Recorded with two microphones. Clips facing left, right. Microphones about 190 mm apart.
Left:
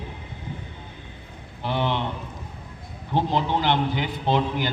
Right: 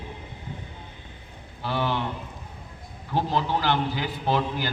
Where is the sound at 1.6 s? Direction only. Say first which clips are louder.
Left 2 dB; 20° left (ahead or behind).